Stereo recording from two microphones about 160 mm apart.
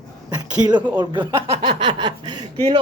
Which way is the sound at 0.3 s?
25° right (ahead or behind).